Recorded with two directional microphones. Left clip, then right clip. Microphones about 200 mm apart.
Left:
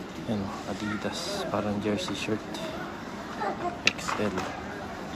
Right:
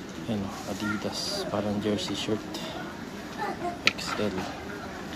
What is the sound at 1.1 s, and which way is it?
A man's voice, centre (ahead or behind).